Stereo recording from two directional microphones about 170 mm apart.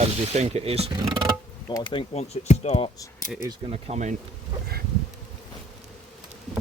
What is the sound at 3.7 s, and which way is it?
Speech, 40° right (ahead or behind).